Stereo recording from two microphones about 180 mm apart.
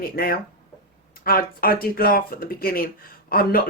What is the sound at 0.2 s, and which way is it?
Speech, 55° left (ahead or behind).